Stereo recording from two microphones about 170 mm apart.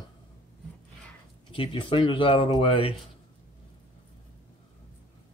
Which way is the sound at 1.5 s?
30° left (ahead or behind).